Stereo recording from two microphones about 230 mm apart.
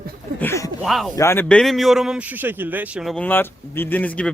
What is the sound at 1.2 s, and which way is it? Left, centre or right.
A man's voice, centre.